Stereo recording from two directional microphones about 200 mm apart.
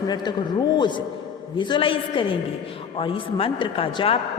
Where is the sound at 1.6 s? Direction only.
25° left (ahead or behind).